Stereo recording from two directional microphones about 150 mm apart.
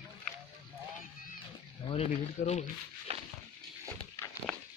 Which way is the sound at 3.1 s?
45° right (ahead or behind).